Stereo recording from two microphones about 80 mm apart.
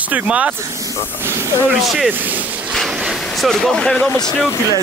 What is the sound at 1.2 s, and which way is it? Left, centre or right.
Speech, right.